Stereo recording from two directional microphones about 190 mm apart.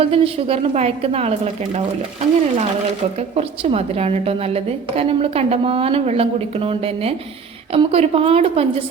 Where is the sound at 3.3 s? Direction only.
35° right (ahead or behind).